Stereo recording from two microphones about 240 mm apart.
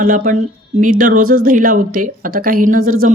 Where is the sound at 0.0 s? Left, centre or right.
Right.